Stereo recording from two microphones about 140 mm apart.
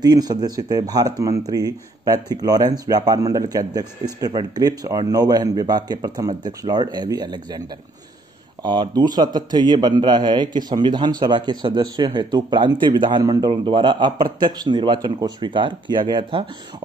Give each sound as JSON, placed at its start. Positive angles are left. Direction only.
{"t": 0.0, "sound": "speech", "side_deg": -30}
{"t": 8.6, "sound": "a man's voice", "side_deg": -30}